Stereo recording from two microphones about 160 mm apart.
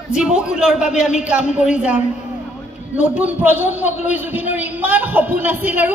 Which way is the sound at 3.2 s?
10° right (ahead or behind).